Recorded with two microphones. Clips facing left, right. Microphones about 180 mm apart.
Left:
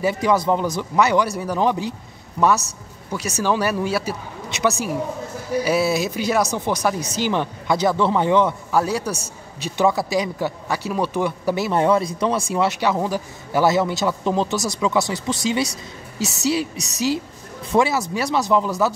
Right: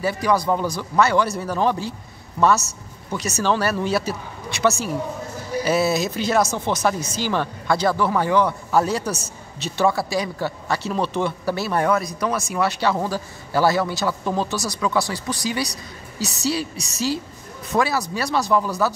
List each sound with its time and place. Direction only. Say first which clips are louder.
0.0 s speech: left 2 dB; 20° left (ahead or behind)
3.1 s speech: even; 10° left (ahead or behind)
8.7 s a man's voice: right 1 dB; 10° left (ahead or behind)